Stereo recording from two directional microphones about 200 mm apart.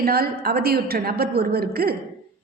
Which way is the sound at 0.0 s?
50° right (ahead or behind).